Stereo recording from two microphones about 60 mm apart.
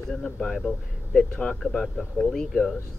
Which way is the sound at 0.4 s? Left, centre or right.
Centre.